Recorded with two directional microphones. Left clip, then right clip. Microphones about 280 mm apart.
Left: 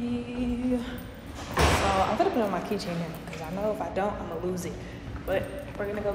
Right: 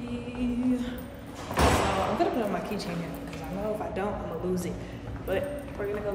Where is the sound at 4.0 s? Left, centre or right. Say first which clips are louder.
Left 5 dB; centre.